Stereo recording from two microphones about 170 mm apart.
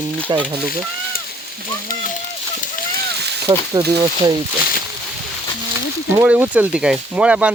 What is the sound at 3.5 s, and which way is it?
Speech, 30° right (ahead or behind).